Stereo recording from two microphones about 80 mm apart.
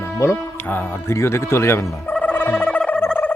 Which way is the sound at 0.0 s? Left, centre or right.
Left.